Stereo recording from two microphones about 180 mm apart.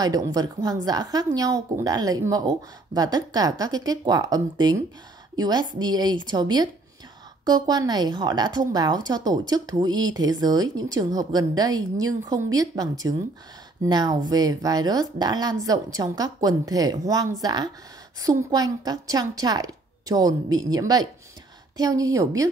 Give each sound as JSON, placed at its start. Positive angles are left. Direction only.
{"t": 0.0, "sound": "a woman's voice", "side_deg": -20}